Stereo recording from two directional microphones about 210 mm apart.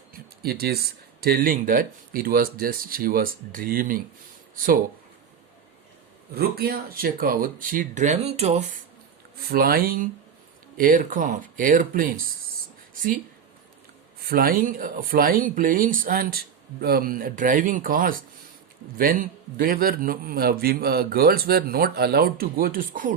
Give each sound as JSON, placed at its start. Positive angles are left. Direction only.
{"t": 0.1, "sound": "a sound", "side_deg": -45}
{"t": 1.2, "sound": "a man's voice", "side_deg": -45}
{"t": 6.3, "sound": "speech", "side_deg": -45}
{"t": 9.5, "sound": "a man's voice", "side_deg": -45}
{"t": 12.9, "sound": "a sound", "side_deg": -40}
{"t": 14.3, "sound": "a man's voice", "side_deg": -45}